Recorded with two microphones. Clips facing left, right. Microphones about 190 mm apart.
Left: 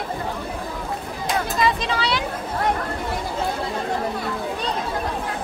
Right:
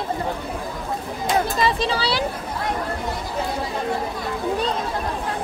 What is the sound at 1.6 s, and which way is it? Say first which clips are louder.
Children playing: right 1 dB; 30° right (ahead or behind).